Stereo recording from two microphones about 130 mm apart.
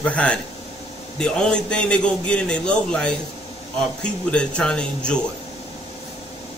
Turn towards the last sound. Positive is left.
turn(degrees=5)  # may be behind; listen again after turning